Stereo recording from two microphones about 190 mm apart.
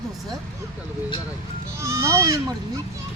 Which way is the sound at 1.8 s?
15° right (ahead or behind).